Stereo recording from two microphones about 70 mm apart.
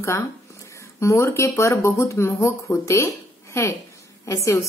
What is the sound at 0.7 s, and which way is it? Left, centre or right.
Speech, left.